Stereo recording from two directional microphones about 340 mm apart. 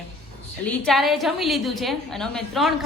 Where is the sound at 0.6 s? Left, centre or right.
Centre.